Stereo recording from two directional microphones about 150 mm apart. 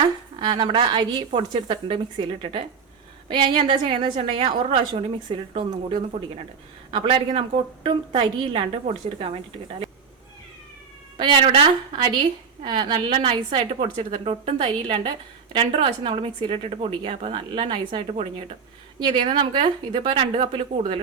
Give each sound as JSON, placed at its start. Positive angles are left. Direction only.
{"t": 0.3, "sound": "a woman's voice", "side_deg": -30}
{"t": 11.2, "sound": "a woman's voice", "side_deg": -30}